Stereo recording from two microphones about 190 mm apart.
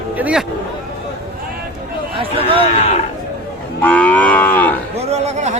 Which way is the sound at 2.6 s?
35° left (ahead or behind).